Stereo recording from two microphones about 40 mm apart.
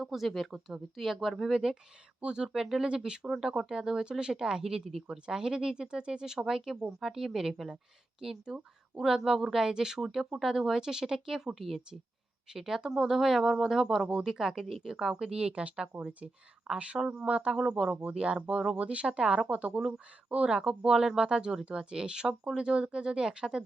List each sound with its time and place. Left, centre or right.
0.0 s speech: centre
2.8 s speech: right
5.1 s speech: right
15.1 s speech: centre
17.6 s speech: centre
18.1 s speech: right
20.5 s speech: centre